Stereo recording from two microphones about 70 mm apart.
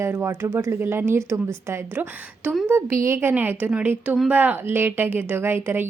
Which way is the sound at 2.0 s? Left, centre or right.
Right.